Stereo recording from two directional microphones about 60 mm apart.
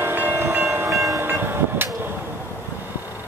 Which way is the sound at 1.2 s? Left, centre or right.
Right.